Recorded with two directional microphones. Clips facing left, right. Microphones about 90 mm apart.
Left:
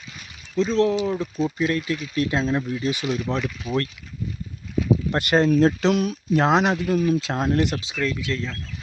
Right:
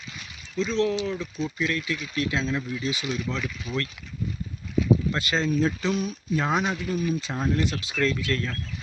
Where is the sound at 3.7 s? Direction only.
40° left (ahead or behind).